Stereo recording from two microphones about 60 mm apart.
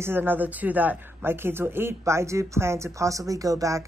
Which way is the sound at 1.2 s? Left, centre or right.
Right.